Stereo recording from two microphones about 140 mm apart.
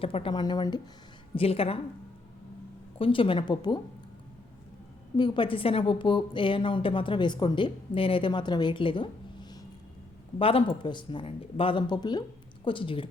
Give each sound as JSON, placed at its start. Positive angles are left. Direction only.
{"t": 0.0, "sound": "a woman's voice", "side_deg": 40}
{"t": 1.4, "sound": "a woman's voice", "side_deg": 45}
{"t": 3.0, "sound": "a woman's voice", "side_deg": 40}
{"t": 5.1, "sound": "a woman's voice", "side_deg": 35}